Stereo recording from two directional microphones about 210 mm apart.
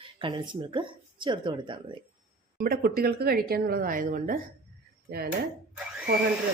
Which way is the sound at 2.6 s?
45° right (ahead or behind).